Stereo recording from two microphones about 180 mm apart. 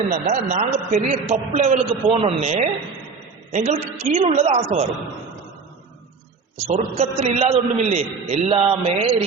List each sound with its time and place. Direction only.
0.0 s a man's voice: 40° right (ahead or behind)
6.7 s a man's voice: 40° right (ahead or behind)